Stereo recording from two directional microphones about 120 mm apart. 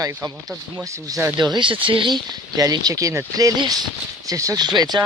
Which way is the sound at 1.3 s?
35° right (ahead or behind).